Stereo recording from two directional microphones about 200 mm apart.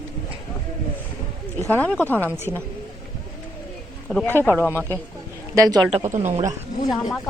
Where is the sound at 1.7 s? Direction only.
10° left (ahead or behind).